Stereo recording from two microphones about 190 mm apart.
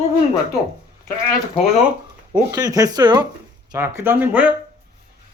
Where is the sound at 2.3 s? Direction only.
20° right (ahead or behind).